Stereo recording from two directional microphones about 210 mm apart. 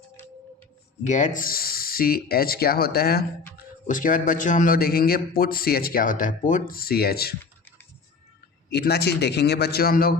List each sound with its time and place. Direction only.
1.0 s a man's voice: 35° left (ahead or behind)
8.7 s a man's voice: 50° left (ahead or behind)